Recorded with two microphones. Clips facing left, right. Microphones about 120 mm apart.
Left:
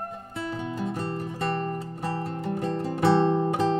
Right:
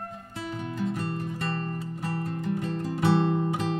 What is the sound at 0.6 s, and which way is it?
Music, 30° left (ahead or behind).